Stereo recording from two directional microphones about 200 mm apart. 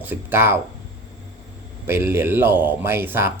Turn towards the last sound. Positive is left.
turn(degrees=-10)  # may be behind; listen again after turning